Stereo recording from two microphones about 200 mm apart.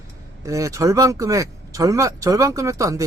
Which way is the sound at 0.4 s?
15° right (ahead or behind).